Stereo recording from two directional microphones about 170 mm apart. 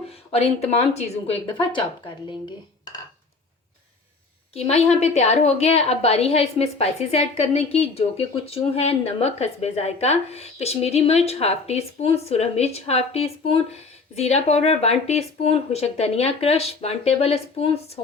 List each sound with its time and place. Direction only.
0.3 s a woman's voice: 35° left (ahead or behind)
4.5 s a woman's voice: 35° left (ahead or behind)